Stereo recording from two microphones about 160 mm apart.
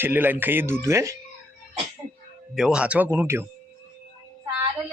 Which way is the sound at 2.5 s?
5° right (ahead or behind).